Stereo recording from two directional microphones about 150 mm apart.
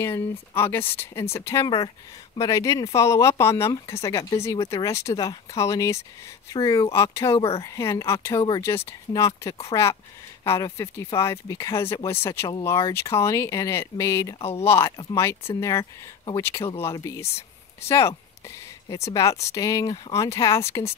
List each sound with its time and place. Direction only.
0.0 s speech: 15° left (ahead or behind)
8.4 s speech: 30° left (ahead or behind)
8.6 s speech: 20° left (ahead or behind)
14.4 s speech: 40° left (ahead or behind)
14.7 s speech: 15° left (ahead or behind)
19.1 s speech: 20° left (ahead or behind)